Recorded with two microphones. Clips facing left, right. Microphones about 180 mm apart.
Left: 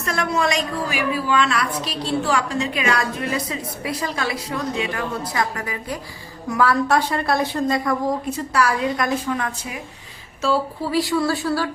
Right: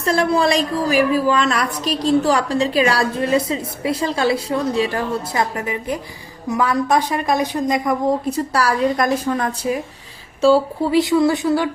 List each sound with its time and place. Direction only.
0.0 s a woman's voice: 30° right (ahead or behind)
8.5 s a woman's voice: 35° right (ahead or behind)
10.4 s a woman's voice: 25° right (ahead or behind)